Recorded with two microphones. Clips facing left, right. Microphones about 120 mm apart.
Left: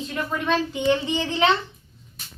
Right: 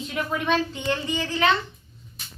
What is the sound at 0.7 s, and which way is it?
Speech, 20° left (ahead or behind).